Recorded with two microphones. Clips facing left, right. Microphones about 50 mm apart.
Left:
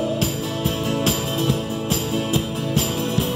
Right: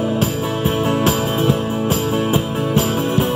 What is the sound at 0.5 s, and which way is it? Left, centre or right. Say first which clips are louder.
Music: right 5 dB; right.